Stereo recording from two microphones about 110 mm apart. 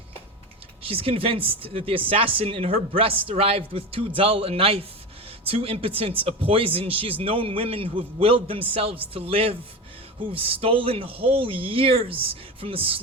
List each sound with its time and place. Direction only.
0.8 s speech: 60° right (ahead or behind)